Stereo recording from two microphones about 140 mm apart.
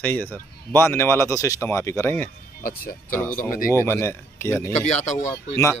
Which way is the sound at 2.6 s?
90° left.